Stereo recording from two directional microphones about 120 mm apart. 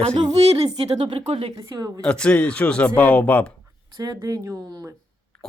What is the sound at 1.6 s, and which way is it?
Speech, 30° right (ahead or behind).